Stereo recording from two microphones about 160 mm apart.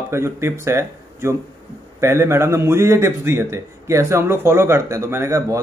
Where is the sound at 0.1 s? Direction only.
15° right (ahead or behind).